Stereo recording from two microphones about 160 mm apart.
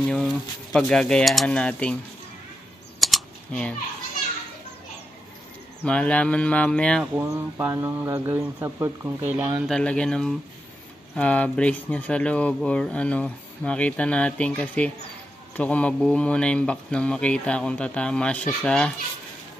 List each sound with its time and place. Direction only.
0.1 s speech: 5° left (ahead or behind)
3.0 s typing: centre (ahead or behind)
5.9 s speech: 5° left (ahead or behind)
7.2 s speech: 15° right (ahead or behind)
9.7 s speech: 5° left (ahead or behind)